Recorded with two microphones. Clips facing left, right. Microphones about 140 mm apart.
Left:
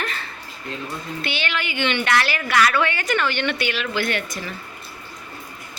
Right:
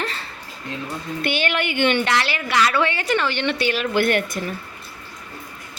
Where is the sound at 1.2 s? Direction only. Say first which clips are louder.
Right 6 dB; 50° right (ahead or behind).